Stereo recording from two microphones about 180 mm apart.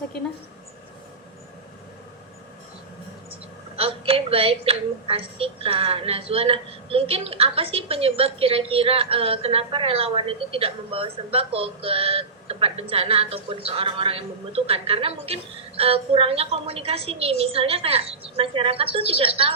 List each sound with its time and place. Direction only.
3.8 s a woman's voice: 30° right (ahead or behind)